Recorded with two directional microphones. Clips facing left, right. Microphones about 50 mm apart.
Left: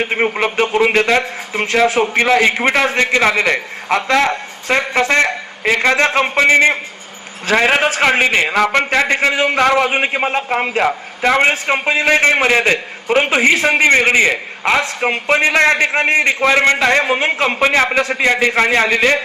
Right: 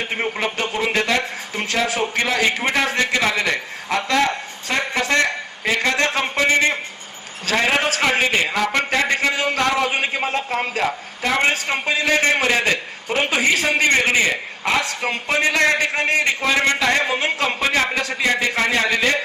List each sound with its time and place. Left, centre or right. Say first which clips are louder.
0.1 s a man's voice: left 6 dB; left